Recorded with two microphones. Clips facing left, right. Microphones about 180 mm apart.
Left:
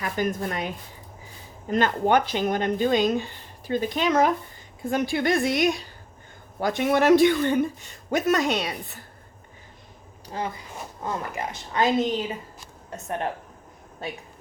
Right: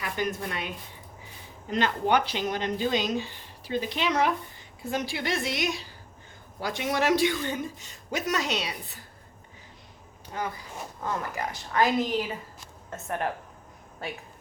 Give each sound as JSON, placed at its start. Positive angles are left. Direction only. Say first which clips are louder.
{"t": 0.0, "sound": "speech", "louder": "left 4 dB", "side_deg": 45}
{"t": 1.7, "sound": "speech", "louder": "left 4 dB", "side_deg": 50}
{"t": 10.2, "sound": "a woman's voice", "louder": "left 2 dB", "side_deg": 30}